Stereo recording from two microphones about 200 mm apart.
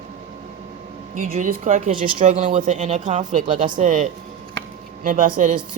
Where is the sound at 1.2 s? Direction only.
40° right (ahead or behind).